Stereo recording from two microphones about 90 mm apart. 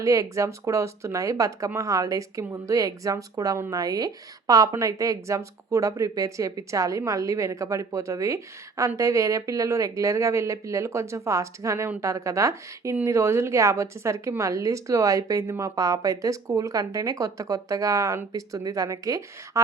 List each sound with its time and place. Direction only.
0.0 s a woman's voice: 35° right (ahead or behind)